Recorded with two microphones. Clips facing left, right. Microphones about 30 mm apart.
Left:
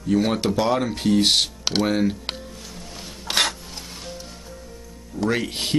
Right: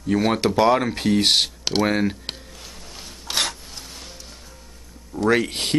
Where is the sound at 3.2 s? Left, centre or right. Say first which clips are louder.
Left 3 dB; left.